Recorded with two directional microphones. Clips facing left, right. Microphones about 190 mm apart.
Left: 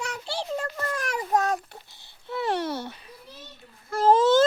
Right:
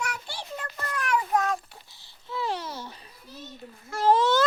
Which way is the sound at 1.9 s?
55° left (ahead or behind).